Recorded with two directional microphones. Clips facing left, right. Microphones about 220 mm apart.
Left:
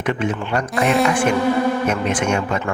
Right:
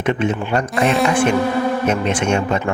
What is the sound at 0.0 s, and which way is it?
Speech, 25° right (ahead or behind).